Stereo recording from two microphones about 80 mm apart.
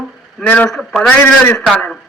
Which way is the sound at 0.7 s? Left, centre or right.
Centre.